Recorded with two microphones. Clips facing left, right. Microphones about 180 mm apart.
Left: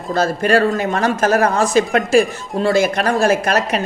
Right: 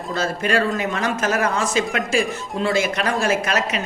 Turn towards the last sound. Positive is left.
turn(degrees=45)  # may be behind; listen again after turning